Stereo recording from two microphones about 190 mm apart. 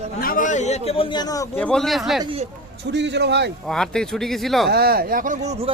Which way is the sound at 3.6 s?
Centre (ahead or behind).